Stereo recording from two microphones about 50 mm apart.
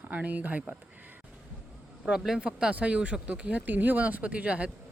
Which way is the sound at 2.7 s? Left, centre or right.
Right.